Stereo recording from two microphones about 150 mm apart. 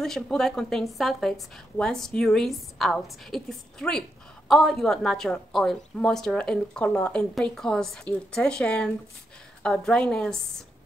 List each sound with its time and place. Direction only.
0.0 s a woman's voice: 5° left (ahead or behind)